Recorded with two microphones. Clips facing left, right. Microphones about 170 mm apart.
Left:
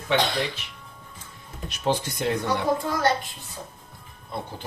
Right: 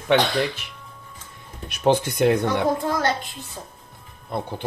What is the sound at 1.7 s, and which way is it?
Speech, 60° right (ahead or behind).